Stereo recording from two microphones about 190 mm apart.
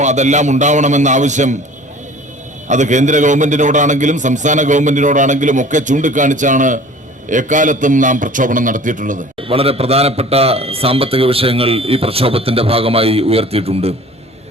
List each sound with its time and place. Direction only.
0.0 s a man's voice: 40° right (ahead or behind)
2.6 s a man's voice: 40° right (ahead or behind)
9.4 s a man's voice: 30° right (ahead or behind)